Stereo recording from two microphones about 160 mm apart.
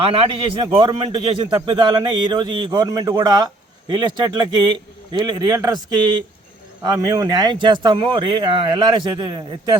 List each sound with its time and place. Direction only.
0.6 s a man's voice: 30° right (ahead or behind)